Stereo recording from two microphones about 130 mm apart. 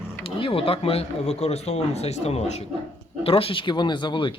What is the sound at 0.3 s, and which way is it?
Speech, 45° left (ahead or behind).